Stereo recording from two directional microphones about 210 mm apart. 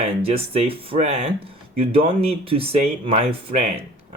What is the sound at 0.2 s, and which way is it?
Speech, 30° right (ahead or behind).